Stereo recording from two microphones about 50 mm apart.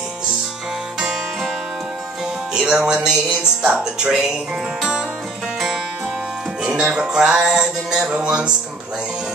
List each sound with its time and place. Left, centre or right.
2.5 s speech: centre
6.6 s music: centre